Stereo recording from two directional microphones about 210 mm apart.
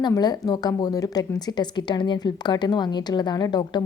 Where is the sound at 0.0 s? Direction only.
20° left (ahead or behind).